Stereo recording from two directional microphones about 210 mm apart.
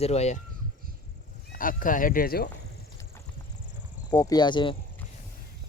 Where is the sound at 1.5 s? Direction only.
40° left (ahead or behind).